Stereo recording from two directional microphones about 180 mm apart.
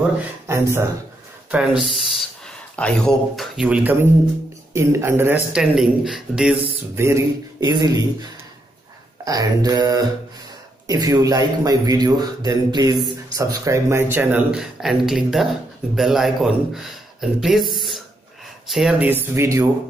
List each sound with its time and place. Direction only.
0.0 s speech: 15° right (ahead or behind)
1.8 s speech: centre (ahead or behind)
7.0 s speech: 15° right (ahead or behind)